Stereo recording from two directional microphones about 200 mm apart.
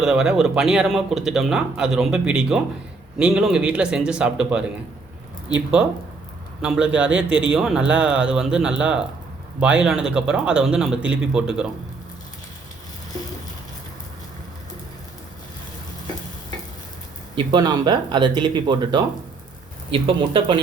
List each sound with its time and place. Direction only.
0.0 s speech: 5° right (ahead or behind)
6.6 s speech: 5° right (ahead or behind)
17.3 s speech: 20° right (ahead or behind)